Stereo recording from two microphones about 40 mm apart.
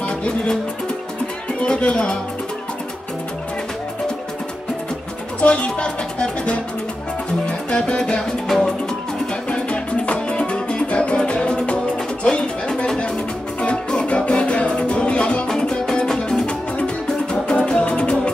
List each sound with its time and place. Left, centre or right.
1.6 s speech: left
5.4 s speech: left
7.4 s music: left
8.5 s music: centre
9.5 s music: left
15.4 s music: centre